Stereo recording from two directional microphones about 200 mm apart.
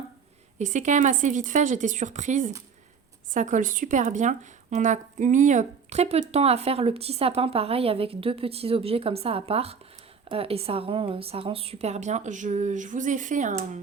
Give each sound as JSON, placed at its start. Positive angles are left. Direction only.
{"t": 0.6, "sound": "speech", "side_deg": -35}